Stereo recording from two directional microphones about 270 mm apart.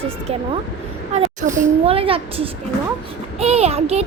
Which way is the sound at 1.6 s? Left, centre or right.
Right.